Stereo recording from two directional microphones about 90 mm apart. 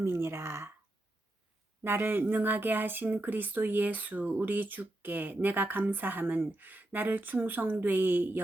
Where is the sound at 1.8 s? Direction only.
25° right (ahead or behind).